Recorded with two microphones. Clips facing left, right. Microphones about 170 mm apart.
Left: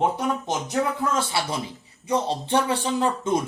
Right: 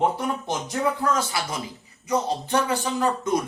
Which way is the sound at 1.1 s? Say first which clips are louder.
Left 1 dB; 30° left (ahead or behind).